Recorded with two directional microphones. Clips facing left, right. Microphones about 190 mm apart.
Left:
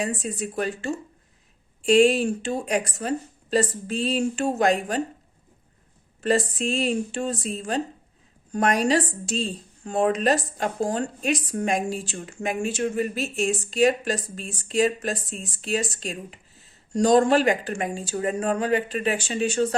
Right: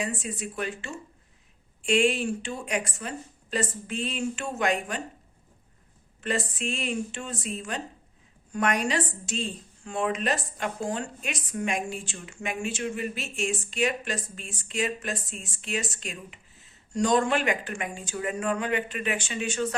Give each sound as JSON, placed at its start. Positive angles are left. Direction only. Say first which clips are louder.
{"t": 0.0, "sound": "a woman's voice", "louder": "left 4 dB", "side_deg": 35}
{"t": 6.2, "sound": "a woman's voice", "louder": "left 7 dB", "side_deg": 35}